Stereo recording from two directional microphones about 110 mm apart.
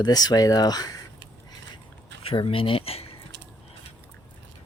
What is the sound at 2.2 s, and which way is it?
Speech, 55° left (ahead or behind).